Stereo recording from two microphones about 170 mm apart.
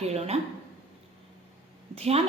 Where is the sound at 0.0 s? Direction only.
40° right (ahead or behind).